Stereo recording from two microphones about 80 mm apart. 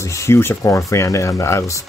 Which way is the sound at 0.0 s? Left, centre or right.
Left.